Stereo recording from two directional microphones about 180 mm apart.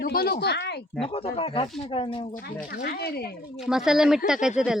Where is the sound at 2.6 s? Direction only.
55° left (ahead or behind).